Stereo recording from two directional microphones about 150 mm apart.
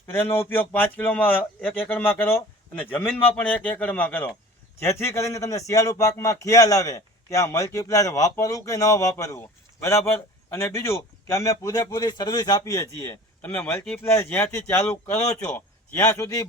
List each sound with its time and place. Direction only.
0.1 s a man's voice: 15° left (ahead or behind)
10.5 s a man's voice: 15° left (ahead or behind)